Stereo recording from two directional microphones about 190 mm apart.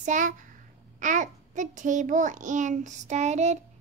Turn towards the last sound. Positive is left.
turn(degrees=-35)  # may be behind; listen again after turning